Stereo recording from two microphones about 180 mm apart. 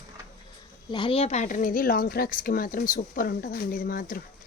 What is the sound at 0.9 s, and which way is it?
Speech, 25° left (ahead or behind).